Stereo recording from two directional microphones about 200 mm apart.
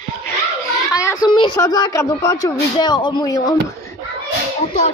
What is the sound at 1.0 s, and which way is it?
Speech, 20° left (ahead or behind).